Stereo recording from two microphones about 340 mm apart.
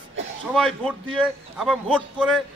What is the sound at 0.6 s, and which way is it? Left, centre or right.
A man's voice, centre.